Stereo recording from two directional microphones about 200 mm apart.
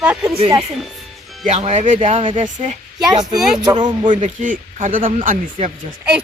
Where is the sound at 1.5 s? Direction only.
35° right (ahead or behind).